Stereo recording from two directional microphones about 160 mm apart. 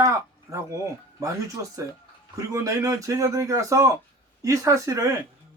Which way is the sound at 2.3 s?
20° right (ahead or behind).